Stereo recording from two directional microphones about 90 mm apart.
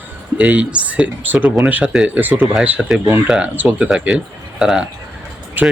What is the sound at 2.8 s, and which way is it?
Speech, centre (ahead or behind).